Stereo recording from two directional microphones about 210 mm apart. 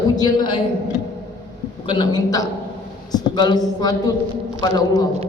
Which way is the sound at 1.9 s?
20° left (ahead or behind).